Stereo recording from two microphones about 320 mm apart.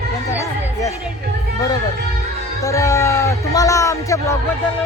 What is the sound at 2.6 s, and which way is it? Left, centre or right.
Speech, centre.